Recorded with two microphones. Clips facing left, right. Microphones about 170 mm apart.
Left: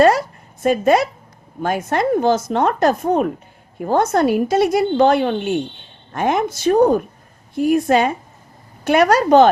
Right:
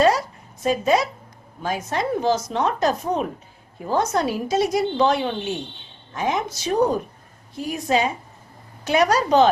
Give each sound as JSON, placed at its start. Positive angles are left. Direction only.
{"t": 0.6, "sound": "a woman's voice", "side_deg": 55}